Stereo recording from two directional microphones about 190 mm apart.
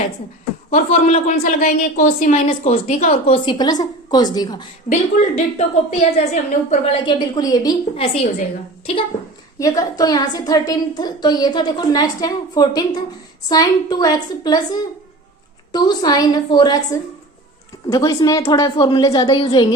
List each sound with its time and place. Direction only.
0.7 s a woman's voice: 35° left (ahead or behind); by 4.6 s 20° left (ahead or behind)
4.9 s a woman's voice: 35° left (ahead or behind); by 7.8 s 20° left (ahead or behind)
9.6 s a woman's voice: 20° left (ahead or behind)